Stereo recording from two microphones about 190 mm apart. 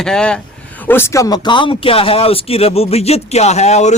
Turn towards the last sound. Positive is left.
turn(degrees=35)  # may be behind; listen again after turning